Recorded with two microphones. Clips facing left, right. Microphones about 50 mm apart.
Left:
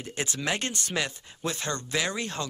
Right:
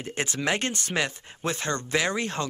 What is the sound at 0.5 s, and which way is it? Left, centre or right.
Speech, right.